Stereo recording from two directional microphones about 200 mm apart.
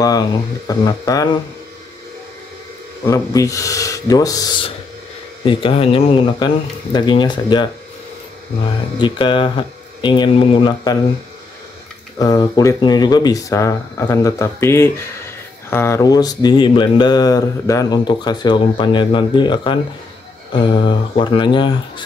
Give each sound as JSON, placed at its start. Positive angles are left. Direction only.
{"t": 0.0, "sound": "speech", "side_deg": 20}
{"t": 3.1, "sound": "speech", "side_deg": 15}
{"t": 8.9, "sound": "speech", "side_deg": 25}
{"t": 12.2, "sound": "speech", "side_deg": 20}